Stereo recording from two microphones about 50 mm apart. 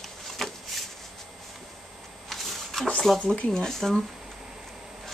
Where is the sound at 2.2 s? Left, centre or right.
Centre.